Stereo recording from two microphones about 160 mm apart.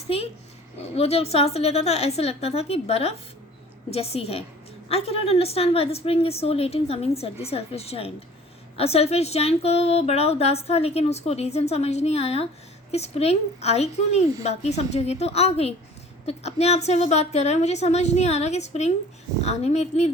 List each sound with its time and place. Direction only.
0.9 s a woman's voice: 40° left (ahead or behind)